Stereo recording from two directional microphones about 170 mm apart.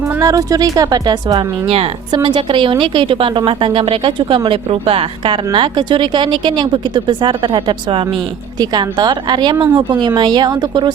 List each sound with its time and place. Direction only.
0.2 s speech: 20° right (ahead or behind)